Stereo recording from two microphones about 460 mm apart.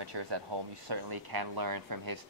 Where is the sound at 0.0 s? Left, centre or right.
Right.